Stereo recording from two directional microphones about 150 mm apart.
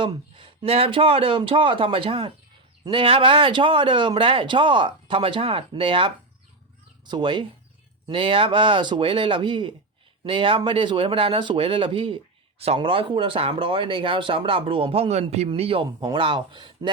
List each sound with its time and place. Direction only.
0.0 s speech: 35° right (ahead or behind)